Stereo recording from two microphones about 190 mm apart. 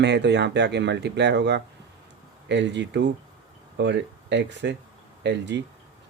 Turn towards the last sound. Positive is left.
turn(degrees=-65)  # may be behind; listen again after turning